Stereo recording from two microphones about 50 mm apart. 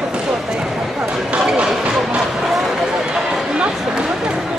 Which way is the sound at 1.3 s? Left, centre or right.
Centre.